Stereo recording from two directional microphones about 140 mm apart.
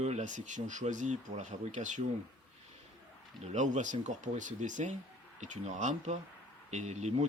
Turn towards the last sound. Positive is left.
turn(degrees=-55)  # may be behind; listen again after turning